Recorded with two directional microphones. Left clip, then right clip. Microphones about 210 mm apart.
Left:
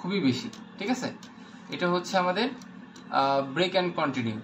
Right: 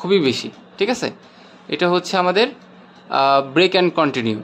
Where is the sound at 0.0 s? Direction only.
55° right (ahead or behind).